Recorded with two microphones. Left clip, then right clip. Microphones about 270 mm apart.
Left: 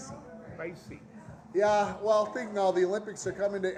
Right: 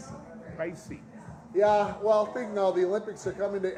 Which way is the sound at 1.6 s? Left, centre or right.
Centre.